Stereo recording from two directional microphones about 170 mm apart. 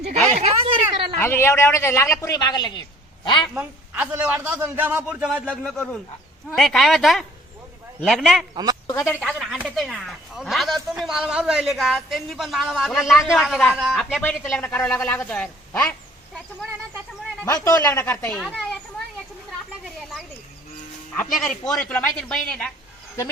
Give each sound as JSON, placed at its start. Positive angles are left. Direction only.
{"t": 0.3, "sound": "speech", "side_deg": -40}
{"t": 1.2, "sound": "a man's voice", "side_deg": 15}
{"t": 3.5, "sound": "a man's voice", "side_deg": -10}
{"t": 5.7, "sound": "a man's voice", "side_deg": 5}
{"t": 8.9, "sound": "a man's voice", "side_deg": 15}
{"t": 9.2, "sound": "a man's voice", "side_deg": 0}
{"t": 17.4, "sound": "speech", "side_deg": 20}
{"t": 19.8, "sound": "a sound", "side_deg": 0}
{"t": 21.3, "sound": "a man's voice", "side_deg": 5}